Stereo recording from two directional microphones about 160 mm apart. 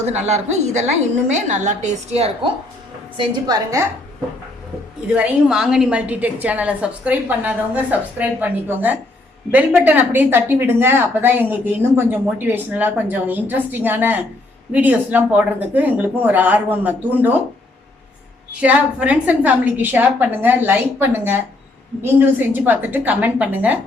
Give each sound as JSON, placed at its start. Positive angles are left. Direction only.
{"t": 0.0, "sound": "a woman's voice", "side_deg": -45}
{"t": 3.2, "sound": "a woman's voice", "side_deg": -20}
{"t": 5.0, "sound": "speech", "side_deg": -5}
{"t": 18.6, "sound": "speech", "side_deg": -10}